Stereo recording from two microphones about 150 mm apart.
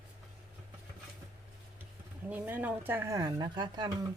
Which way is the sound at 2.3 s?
10° right (ahead or behind).